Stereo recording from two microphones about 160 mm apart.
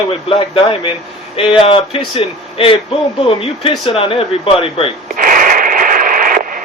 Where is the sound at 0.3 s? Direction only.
35° left (ahead or behind).